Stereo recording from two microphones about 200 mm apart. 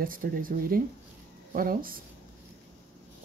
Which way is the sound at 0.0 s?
45° right (ahead or behind).